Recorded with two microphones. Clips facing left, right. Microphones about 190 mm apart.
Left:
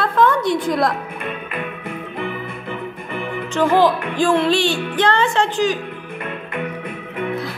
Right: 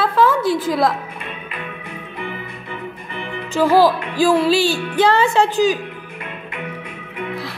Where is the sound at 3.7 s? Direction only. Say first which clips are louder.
Right 2 dB; 35° right (ahead or behind).